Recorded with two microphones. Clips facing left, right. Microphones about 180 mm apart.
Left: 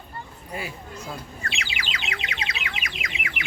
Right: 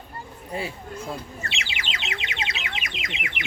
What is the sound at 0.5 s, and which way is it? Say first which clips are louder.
Speech: right 3 dB; 30° right (ahead or behind).